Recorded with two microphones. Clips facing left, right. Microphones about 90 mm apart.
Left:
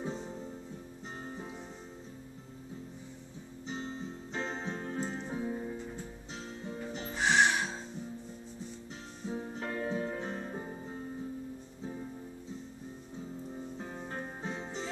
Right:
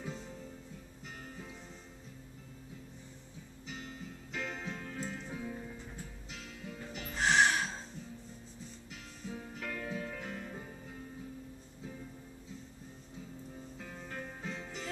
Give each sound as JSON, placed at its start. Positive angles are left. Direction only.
{"t": 0.0, "sound": "music", "side_deg": 30}
{"t": 3.6, "sound": "music", "side_deg": 30}
{"t": 7.2, "sound": "music", "side_deg": 0}
{"t": 9.2, "sound": "music", "side_deg": 30}
{"t": 13.7, "sound": "music", "side_deg": 30}